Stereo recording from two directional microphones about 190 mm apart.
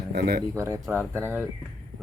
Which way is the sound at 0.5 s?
15° right (ahead or behind).